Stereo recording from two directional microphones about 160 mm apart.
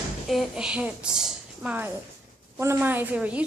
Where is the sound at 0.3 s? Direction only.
Centre (ahead or behind).